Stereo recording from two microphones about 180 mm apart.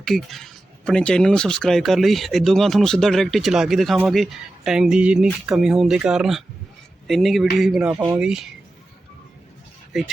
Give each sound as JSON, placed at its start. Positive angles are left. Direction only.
{"t": 0.0, "sound": "speech", "side_deg": 0}
{"t": 7.9, "sound": "speech", "side_deg": -20}
{"t": 8.2, "sound": "speech", "side_deg": -5}
{"t": 9.9, "sound": "speech", "side_deg": 0}